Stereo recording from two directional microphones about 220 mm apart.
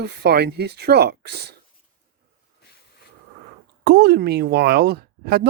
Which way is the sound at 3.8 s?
45° right (ahead or behind).